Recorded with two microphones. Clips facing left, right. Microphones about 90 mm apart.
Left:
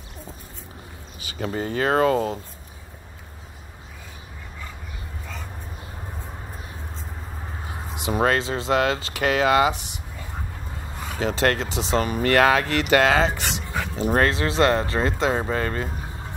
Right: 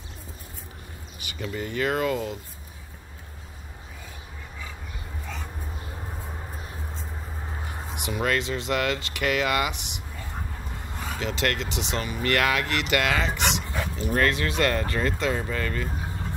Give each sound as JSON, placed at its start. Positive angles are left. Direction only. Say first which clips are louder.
{"t": 1.4, "sound": "speech", "louder": "left 4 dB", "side_deg": 40}
{"t": 8.1, "sound": "speech", "louder": "left 5 dB", "side_deg": 35}
{"t": 11.1, "sound": "speech", "louder": "left 6 dB", "side_deg": 35}